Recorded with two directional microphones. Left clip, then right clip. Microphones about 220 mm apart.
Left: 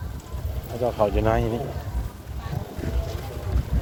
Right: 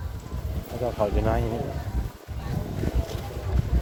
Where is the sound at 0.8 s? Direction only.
20° left (ahead or behind).